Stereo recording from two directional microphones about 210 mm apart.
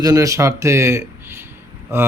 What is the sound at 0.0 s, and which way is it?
Speech, 15° right (ahead or behind).